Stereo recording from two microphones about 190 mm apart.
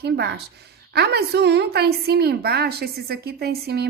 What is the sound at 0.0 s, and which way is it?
A woman's voice, 60° right (ahead or behind).